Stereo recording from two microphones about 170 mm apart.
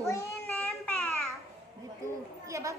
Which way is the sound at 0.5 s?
Centre (ahead or behind).